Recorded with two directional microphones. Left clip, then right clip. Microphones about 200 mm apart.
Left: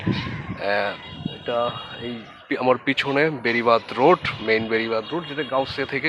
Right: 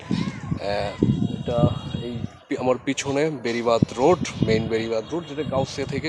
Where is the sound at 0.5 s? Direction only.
Centre (ahead or behind).